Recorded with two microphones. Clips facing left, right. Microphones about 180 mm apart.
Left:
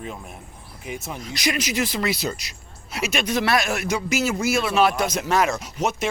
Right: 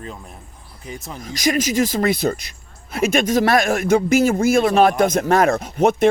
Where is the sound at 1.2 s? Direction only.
45° right (ahead or behind).